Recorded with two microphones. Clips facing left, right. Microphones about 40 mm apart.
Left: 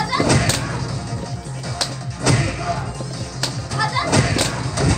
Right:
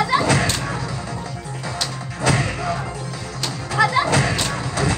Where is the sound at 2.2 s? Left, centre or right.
Right.